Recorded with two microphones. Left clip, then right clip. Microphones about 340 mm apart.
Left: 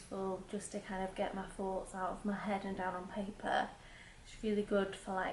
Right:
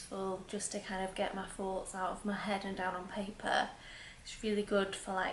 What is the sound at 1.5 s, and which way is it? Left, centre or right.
A woman's voice, centre.